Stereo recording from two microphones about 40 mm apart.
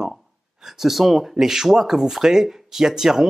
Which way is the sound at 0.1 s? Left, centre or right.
Centre.